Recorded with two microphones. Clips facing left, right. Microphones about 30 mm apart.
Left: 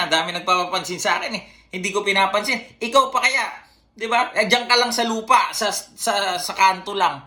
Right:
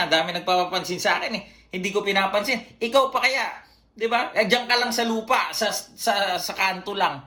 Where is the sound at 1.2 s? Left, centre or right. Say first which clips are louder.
Left 1 dB; left.